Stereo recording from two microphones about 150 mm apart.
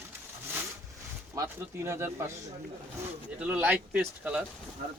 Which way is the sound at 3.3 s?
10° right (ahead or behind).